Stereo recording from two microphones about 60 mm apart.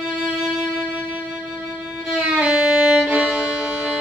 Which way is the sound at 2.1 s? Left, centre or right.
Centre.